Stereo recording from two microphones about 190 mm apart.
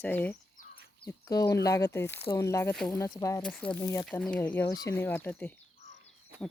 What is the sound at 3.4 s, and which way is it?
Speech, 5° left (ahead or behind).